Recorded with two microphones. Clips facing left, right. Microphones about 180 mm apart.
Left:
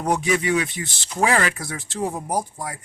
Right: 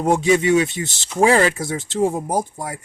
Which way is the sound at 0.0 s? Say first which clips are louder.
Right 5 dB; 25° right (ahead or behind).